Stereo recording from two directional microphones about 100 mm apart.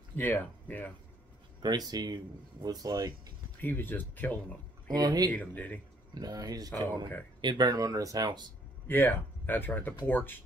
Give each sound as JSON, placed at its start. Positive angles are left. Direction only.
{"t": 0.1, "sound": "speech", "side_deg": 15}
{"t": 1.9, "sound": "speech", "side_deg": -40}
{"t": 3.6, "sound": "speech", "side_deg": 20}
{"t": 4.9, "sound": "speech", "side_deg": -40}
{"t": 5.3, "sound": "speech", "side_deg": 15}
{"t": 6.1, "sound": "speech", "side_deg": -40}
{"t": 8.8, "sound": "speech", "side_deg": 20}